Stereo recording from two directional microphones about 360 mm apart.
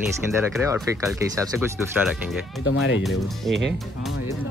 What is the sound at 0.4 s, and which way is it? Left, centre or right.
Speech, centre.